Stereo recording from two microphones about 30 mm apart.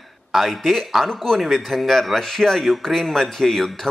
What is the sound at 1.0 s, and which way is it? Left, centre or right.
Speech, centre.